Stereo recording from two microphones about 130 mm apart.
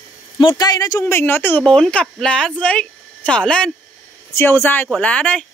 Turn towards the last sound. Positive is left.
turn(degrees=10)  # may be behind; listen again after turning